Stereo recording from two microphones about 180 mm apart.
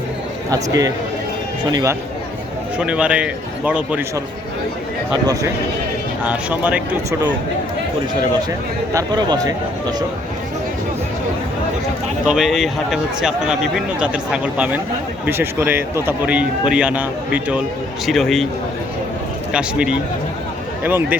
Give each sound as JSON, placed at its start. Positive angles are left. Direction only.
{"t": 0.5, "sound": "speech", "side_deg": -20}
{"t": 2.7, "sound": "a man's voice", "side_deg": -5}
{"t": 5.2, "sound": "speech", "side_deg": -20}
{"t": 6.2, "sound": "a man's voice", "side_deg": -10}
{"t": 8.9, "sound": "speech", "side_deg": -20}
{"t": 12.2, "sound": "a man's voice", "side_deg": -5}
{"t": 19.5, "sound": "a man's voice", "side_deg": -5}